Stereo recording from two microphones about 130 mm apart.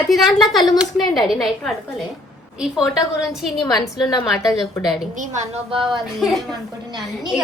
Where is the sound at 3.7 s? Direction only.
30° left (ahead or behind).